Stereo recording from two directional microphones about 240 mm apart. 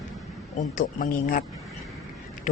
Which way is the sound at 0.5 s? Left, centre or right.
Left.